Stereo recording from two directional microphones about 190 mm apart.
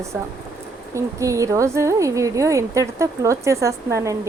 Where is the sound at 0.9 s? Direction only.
15° right (ahead or behind).